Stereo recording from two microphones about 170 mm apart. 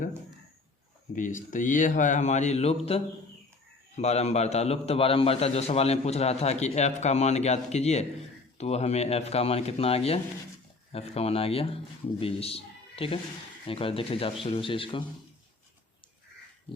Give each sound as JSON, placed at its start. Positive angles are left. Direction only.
{"t": 1.1, "sound": "a man's voice", "side_deg": 50}